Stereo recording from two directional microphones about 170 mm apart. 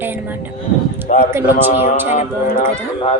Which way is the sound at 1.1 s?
45° left (ahead or behind).